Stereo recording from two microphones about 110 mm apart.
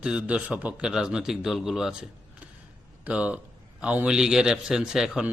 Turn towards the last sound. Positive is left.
turn(degrees=-5)  # may be behind; listen again after turning